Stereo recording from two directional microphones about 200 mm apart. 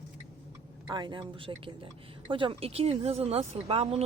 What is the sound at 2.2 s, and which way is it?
Speech, 25° right (ahead or behind).